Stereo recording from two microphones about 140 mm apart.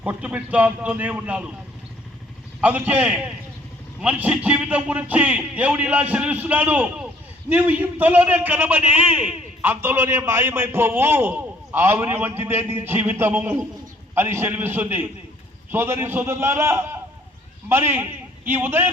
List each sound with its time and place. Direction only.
0.0 s a man's voice: 10° right (ahead or behind)
2.6 s a man's voice: 10° right (ahead or behind)